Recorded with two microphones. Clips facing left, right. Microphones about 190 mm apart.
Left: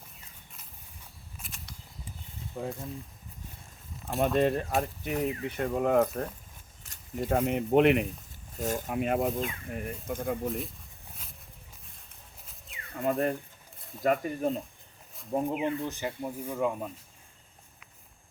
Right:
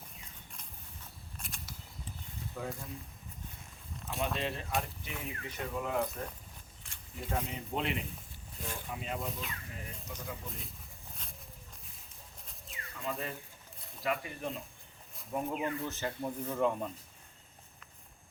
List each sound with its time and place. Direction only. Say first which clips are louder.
1.4 s a sound: even; centre (ahead or behind)
2.5 s speech: left 5 dB; 20° left (ahead or behind)
4.4 s speech: left 10 dB; 50° left (ahead or behind)
6.8 s keys jangling: left 11 dB; 40° left (ahead or behind)
7.3 s speech: left 11 dB; 60° left (ahead or behind)
8.5 s speech: left 11 dB; 45° left (ahead or behind)
8.9 s speech: left 11 dB; 60° left (ahead or behind)
12.9 s speech: left 11 dB; 55° left (ahead or behind)
14.0 s speech: left 9 dB; 45° left (ahead or behind)
15.3 s speech: left 6 dB; 30° left (ahead or behind)
15.6 s speech: left 4 dB; 20° left (ahead or behind)